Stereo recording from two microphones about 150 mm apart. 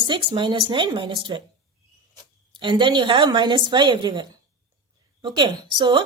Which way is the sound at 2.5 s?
30° right (ahead or behind).